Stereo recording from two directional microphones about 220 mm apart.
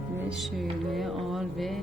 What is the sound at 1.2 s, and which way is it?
Music, centre (ahead or behind).